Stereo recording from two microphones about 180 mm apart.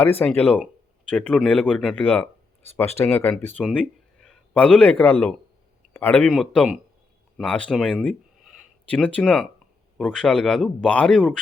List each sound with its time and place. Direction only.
0.0 s speech: 10° left (ahead or behind)